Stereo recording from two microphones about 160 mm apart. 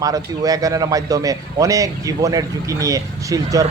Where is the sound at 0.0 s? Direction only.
20° right (ahead or behind).